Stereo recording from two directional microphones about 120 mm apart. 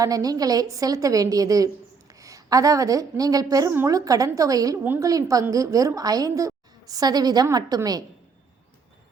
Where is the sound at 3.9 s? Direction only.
30° right (ahead or behind).